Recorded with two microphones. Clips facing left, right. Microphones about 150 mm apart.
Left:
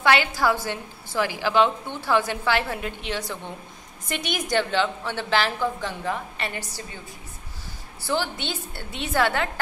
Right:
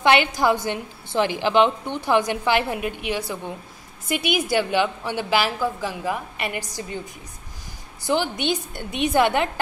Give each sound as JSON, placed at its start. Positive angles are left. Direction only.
{"t": 0.0, "sound": "a woman's voice", "side_deg": -20}
{"t": 8.0, "sound": "a woman's voice", "side_deg": -15}